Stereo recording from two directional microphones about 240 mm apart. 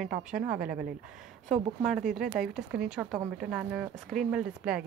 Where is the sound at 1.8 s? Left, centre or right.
Centre.